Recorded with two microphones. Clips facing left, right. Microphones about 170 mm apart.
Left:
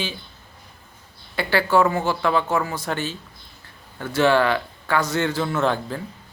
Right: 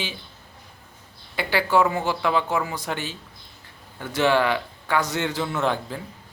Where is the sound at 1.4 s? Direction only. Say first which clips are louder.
Left 2 dB; 15° right (ahead or behind).